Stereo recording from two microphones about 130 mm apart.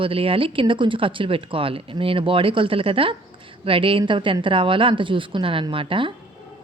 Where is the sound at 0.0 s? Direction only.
45° right (ahead or behind).